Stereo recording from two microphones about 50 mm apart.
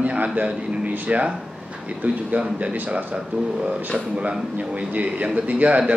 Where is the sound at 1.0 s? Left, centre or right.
Right.